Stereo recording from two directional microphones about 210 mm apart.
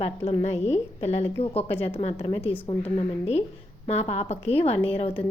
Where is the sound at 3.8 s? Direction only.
30° left (ahead or behind).